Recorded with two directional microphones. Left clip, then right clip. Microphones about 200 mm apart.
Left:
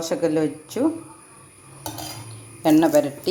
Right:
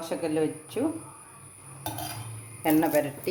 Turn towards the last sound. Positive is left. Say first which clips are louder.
# left 7 dB
turn(degrees=30)  # may be behind; listen again after turning